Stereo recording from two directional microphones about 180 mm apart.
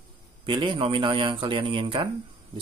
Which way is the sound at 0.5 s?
25° right (ahead or behind).